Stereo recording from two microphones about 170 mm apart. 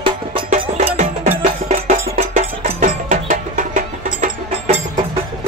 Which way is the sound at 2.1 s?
50° right (ahead or behind).